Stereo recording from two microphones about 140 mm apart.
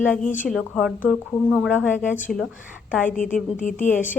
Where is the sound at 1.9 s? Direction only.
15° left (ahead or behind).